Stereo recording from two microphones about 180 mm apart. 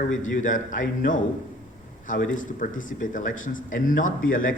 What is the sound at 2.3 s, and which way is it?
A man's voice, 45° left (ahead or behind).